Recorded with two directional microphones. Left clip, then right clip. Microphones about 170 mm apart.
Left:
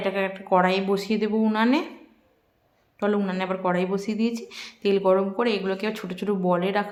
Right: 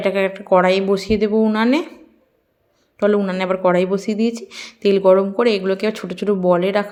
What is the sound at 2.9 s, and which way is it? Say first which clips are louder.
Speech: right 8 dB; 25° right (ahead or behind).